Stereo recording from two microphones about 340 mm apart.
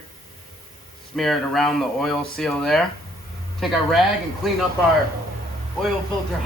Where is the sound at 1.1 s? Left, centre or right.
Centre.